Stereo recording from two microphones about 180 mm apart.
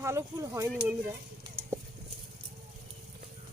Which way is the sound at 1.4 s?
15° right (ahead or behind).